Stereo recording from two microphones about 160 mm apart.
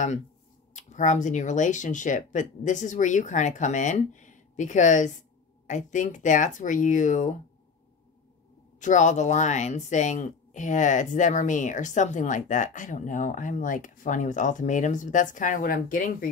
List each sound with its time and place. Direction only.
0.7 s speech: 50° left (ahead or behind)
8.7 s speech: 50° left (ahead or behind)